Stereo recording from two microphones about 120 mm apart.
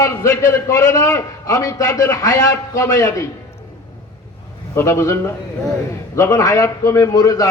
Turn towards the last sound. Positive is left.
turn(degrees=30)  # may be behind; listen again after turning